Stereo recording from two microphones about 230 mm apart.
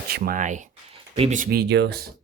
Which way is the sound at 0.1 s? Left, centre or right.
Right.